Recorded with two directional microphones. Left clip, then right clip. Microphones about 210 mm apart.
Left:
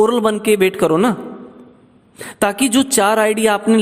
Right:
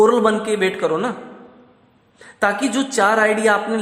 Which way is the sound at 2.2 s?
40° left (ahead or behind).